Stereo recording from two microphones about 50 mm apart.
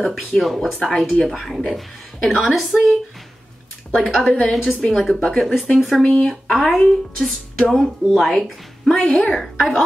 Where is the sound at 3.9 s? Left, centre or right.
Centre.